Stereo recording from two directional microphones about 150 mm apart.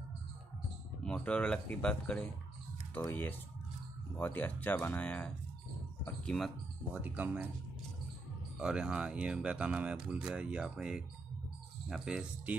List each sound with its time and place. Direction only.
1.0 s speech: 10° left (ahead or behind)
6.9 s speech: 10° right (ahead or behind)
8.5 s speech: 5° right (ahead or behind)